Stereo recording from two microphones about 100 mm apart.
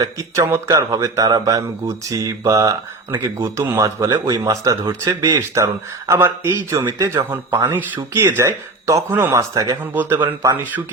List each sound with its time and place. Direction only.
0.0 s speech: 35° right (ahead or behind)
3.8 s speech: 35° right (ahead or behind)
10.4 s speech: 20° right (ahead or behind)